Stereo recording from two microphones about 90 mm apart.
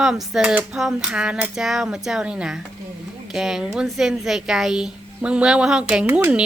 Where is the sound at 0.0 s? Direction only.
5° right (ahead or behind).